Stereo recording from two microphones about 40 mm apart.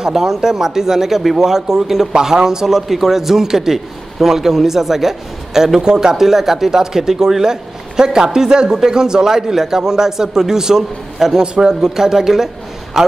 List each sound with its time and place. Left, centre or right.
0.0 s speech: centre
11.4 s speech: right
11.8 s speech: centre